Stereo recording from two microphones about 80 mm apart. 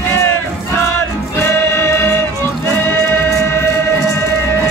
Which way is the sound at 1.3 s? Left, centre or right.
Left.